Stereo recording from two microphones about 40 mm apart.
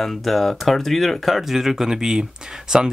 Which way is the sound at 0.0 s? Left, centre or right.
Centre.